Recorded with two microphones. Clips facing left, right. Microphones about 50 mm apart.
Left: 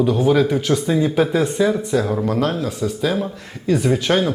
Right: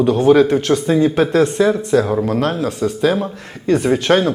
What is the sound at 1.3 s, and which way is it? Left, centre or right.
Speech, centre.